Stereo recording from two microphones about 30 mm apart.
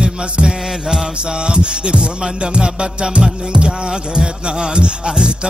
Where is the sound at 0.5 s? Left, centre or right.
Centre.